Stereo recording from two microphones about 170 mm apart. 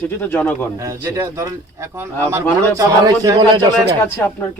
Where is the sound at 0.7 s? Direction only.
20° right (ahead or behind).